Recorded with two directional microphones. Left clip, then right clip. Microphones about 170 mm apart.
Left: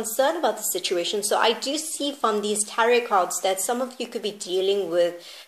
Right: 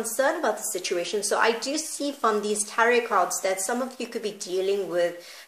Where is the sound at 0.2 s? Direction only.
30° left (ahead or behind).